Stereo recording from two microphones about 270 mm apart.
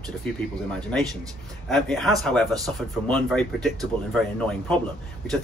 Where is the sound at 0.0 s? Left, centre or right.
Centre.